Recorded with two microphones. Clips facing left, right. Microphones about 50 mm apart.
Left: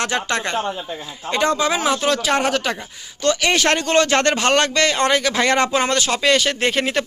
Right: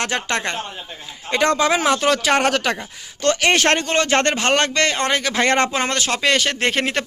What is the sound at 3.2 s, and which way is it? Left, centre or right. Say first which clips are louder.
Speech: right 1 dB; right.